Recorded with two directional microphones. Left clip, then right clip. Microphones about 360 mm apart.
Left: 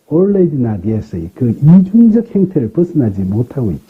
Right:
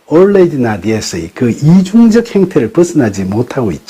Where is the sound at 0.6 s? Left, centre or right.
Centre.